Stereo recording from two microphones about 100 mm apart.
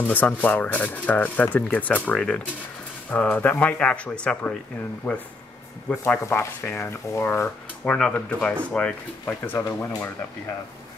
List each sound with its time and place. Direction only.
0.0 s speech: 15° left (ahead or behind)
9.2 s speech: 25° left (ahead or behind)